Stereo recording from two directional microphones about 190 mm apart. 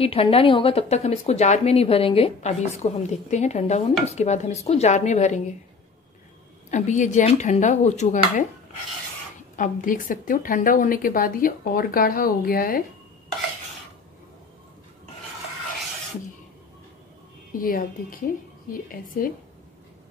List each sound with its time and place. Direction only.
0.0 s speech: 30° left (ahead or behind)
6.7 s speech: 40° left (ahead or behind)
9.6 s speech: 45° left (ahead or behind)
17.5 s a woman's voice: 45° left (ahead or behind)